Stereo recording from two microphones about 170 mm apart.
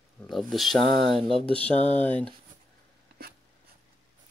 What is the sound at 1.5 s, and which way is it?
Speech, 10° left (ahead or behind).